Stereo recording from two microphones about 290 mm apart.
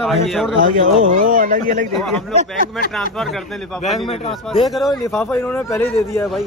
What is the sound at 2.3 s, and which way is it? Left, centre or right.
Speech, left.